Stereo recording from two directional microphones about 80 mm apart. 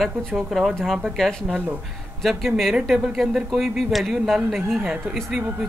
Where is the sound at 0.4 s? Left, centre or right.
Centre.